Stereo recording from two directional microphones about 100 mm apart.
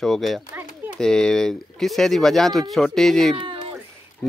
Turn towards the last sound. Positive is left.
turn(degrees=10)  # may be behind; listen again after turning